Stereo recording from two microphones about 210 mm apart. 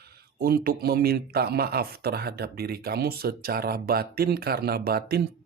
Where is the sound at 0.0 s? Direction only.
45° right (ahead or behind).